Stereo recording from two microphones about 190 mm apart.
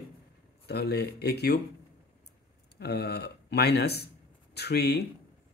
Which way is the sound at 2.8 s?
60° left (ahead or behind).